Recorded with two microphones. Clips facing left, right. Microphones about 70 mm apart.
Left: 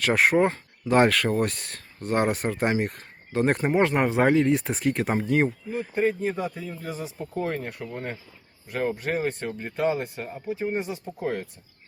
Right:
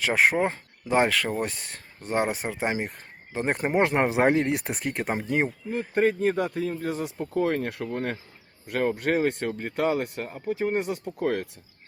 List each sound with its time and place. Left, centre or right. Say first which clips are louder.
0.0 s speech: left 2 dB; centre
0.4 s speech: left 3 dB; centre
4.4 s speech: left 4 dB; right
4.6 s speech: left 4 dB; centre
5.7 s speech: right 4 dB; right
8.7 s speech: right 2 dB; right